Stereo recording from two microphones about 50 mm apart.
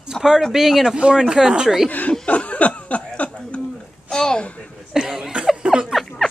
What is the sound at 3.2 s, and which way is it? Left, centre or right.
Chuckle, left.